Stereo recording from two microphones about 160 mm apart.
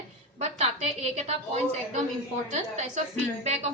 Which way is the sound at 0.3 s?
45° right (ahead or behind).